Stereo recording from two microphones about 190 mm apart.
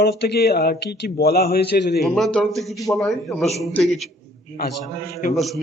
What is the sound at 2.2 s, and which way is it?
A man's voice, centre (ahead or behind).